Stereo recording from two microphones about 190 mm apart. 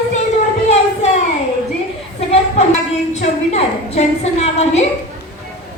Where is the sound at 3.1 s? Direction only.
35° left (ahead or behind).